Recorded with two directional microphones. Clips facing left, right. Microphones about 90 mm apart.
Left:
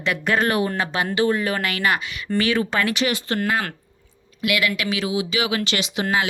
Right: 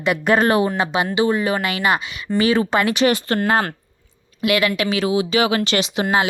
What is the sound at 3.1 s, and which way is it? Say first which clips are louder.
Speech: right 6 dB; 45° right (ahead or behind).